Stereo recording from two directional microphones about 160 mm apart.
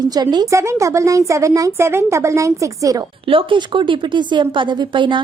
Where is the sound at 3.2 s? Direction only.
35° right (ahead or behind).